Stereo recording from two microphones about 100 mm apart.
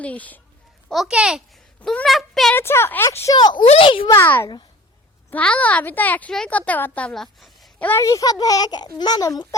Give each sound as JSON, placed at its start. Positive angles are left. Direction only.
{"t": 0.0, "sound": "speech", "side_deg": 15}
{"t": 0.9, "sound": "a child's voice", "side_deg": 0}
{"t": 2.0, "sound": "a child's voice", "side_deg": 0}
{"t": 2.6, "sound": "speech", "side_deg": 25}
{"t": 3.3, "sound": "a child's voice", "side_deg": 50}
{"t": 3.7, "sound": "a child's voice", "side_deg": 65}
{"t": 4.0, "sound": "speech", "side_deg": 35}
{"t": 5.3, "sound": "speech", "side_deg": 15}
{"t": 7.1, "sound": "speech", "side_deg": 0}
{"t": 7.8, "sound": "speech", "side_deg": 20}
{"t": 8.0, "sound": "a child's voice", "side_deg": 35}